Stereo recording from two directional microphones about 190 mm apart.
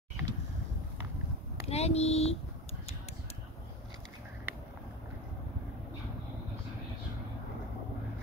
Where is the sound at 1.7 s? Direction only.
35° left (ahead or behind).